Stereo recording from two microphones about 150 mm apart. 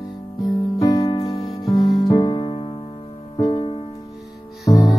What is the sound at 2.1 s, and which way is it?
Music, 30° left (ahead or behind).